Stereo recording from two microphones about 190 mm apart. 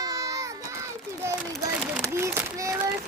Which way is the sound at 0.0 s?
20° right (ahead or behind).